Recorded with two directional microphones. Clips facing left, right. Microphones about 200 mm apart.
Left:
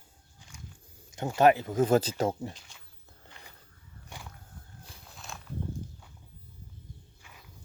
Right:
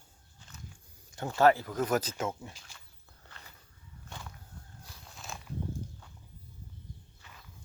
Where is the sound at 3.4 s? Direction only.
15° left (ahead or behind).